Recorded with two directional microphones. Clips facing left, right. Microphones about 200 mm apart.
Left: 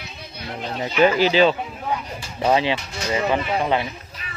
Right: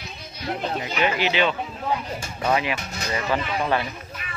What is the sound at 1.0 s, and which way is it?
Speech, 35° left (ahead or behind).